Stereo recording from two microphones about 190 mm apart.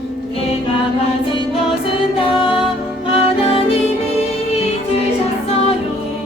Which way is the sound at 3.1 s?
30° left (ahead or behind).